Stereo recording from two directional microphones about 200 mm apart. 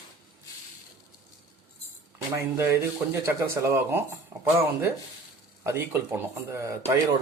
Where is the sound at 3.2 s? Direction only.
15° right (ahead or behind).